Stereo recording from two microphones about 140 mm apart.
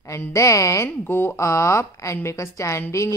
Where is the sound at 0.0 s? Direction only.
20° left (ahead or behind).